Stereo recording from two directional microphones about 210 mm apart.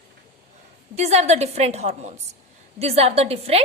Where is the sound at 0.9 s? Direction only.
30° right (ahead or behind).